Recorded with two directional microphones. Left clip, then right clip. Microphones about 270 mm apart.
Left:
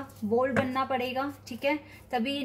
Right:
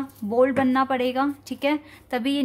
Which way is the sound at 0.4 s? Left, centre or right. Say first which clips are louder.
Right 9 dB; right.